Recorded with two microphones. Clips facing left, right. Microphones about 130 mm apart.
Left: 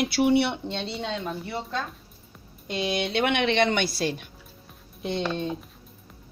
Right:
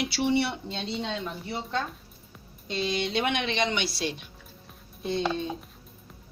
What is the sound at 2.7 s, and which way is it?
Speech, 60° left (ahead or behind).